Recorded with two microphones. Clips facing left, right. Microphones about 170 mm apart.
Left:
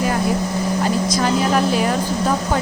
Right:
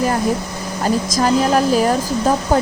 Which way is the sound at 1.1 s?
40° right (ahead or behind).